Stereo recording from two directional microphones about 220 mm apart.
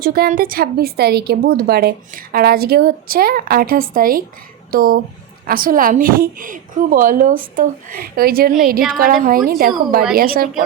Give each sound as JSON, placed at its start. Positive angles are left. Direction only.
{"t": 0.0, "sound": "a woman's voice", "side_deg": -40}